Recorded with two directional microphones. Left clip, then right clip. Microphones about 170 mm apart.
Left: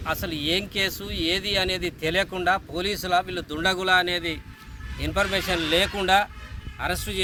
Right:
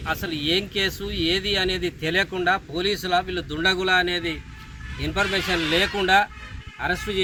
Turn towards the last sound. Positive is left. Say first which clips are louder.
# right 3 dB
turn(degrees=25)  # may be behind; listen again after turning